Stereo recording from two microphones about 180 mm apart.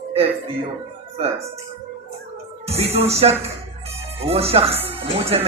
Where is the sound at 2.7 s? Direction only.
35° right (ahead or behind).